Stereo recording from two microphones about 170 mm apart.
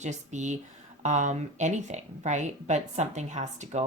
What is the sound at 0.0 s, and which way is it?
Speech, 45° right (ahead or behind).